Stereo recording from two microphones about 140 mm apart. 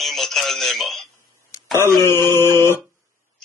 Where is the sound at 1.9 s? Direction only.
20° left (ahead or behind).